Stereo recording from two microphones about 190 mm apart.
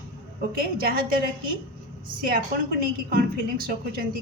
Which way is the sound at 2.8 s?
50° right (ahead or behind).